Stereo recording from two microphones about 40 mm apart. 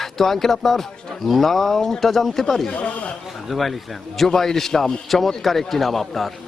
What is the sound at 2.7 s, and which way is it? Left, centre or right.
Speech, left.